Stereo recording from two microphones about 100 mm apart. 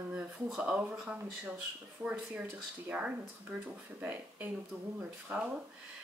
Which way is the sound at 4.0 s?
15° right (ahead or behind).